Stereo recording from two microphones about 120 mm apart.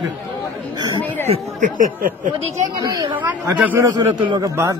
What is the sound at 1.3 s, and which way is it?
Speech, 90° right.